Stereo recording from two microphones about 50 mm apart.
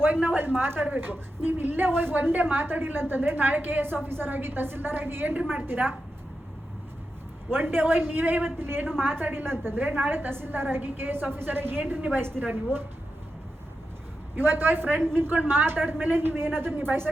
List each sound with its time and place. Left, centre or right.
0.0 s a woman's voice: right
7.5 s a woman's voice: right
14.3 s a woman's voice: right